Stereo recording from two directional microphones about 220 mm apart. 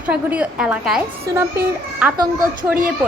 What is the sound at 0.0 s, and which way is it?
A woman's voice, 5° right (ahead or behind).